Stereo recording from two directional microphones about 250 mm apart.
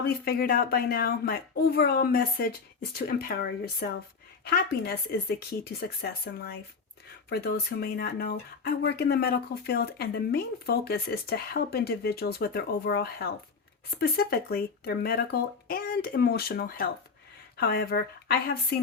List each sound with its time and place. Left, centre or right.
0.0 s speech: left